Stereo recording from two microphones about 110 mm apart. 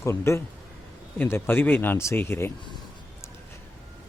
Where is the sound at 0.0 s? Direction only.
25° left (ahead or behind).